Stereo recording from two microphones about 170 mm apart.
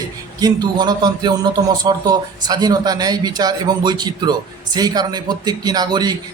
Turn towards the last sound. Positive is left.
turn(degrees=-25)  # may be behind; listen again after turning